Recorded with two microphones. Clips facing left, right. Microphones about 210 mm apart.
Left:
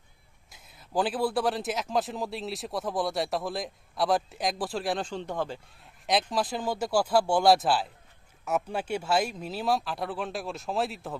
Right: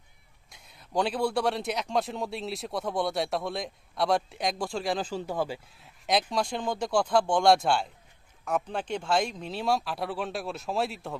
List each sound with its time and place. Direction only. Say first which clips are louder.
0.5 s a man's voice: even; centre (ahead or behind)